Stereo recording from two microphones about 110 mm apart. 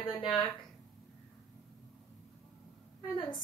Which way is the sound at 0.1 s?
45° left (ahead or behind).